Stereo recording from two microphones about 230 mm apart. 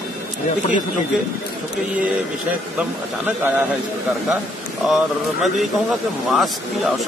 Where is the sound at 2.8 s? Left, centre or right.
Centre.